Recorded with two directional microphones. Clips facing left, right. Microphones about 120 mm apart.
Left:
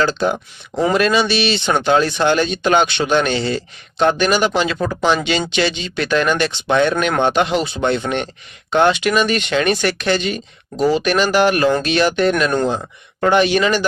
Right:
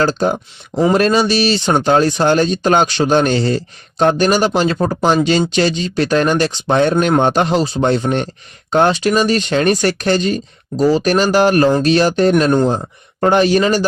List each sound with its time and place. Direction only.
0.0 s speech: 40° right (ahead or behind)
12.5 s speech: 25° right (ahead or behind)
13.1 s speech: 40° right (ahead or behind)